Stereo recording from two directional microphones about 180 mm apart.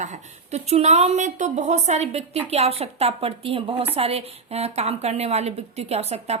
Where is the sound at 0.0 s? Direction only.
40° right (ahead or behind).